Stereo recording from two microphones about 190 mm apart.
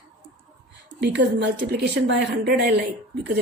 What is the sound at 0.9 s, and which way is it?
A woman's voice, 65° right (ahead or behind).